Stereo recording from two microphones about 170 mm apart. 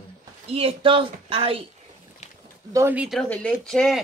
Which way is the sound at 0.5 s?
35° right (ahead or behind).